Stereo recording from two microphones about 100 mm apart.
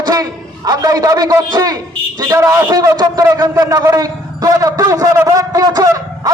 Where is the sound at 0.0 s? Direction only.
40° right (ahead or behind).